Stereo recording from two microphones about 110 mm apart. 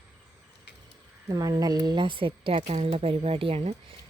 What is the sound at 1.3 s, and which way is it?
Speech, 35° right (ahead or behind).